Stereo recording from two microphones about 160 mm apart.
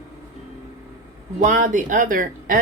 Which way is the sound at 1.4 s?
55° right (ahead or behind).